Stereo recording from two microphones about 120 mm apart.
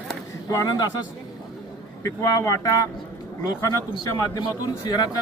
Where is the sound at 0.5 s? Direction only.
30° left (ahead or behind).